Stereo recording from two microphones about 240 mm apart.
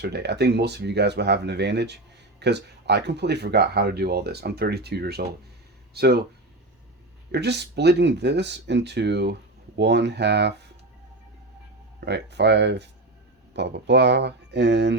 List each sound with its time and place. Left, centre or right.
0.0 s speech: right
7.3 s speech: right
11.9 s speech: right